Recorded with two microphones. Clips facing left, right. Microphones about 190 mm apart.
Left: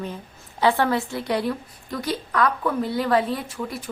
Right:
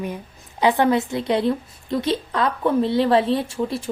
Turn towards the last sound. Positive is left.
turn(degrees=-25)  # may be behind; listen again after turning